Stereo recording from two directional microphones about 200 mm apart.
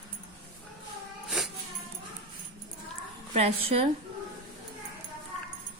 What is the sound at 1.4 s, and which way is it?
Dog, 5° right (ahead or behind).